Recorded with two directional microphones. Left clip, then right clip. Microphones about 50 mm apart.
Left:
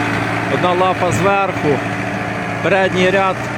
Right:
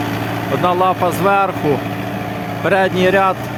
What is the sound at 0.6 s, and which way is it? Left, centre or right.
Speech, right.